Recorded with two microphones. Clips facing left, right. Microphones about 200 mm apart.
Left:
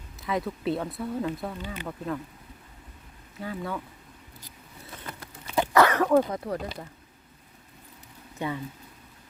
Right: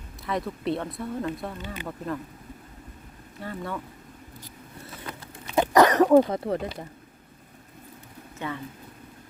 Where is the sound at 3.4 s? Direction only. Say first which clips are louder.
Even; centre (ahead or behind).